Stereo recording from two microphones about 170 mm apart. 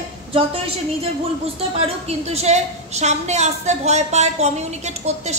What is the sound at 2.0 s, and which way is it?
A woman's voice, 40° right (ahead or behind).